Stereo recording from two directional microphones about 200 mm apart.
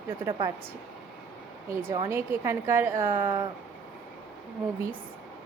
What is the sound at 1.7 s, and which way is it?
A woman's voice, 15° right (ahead or behind).